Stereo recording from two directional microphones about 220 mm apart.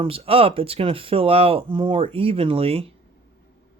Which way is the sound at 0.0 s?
25° right (ahead or behind).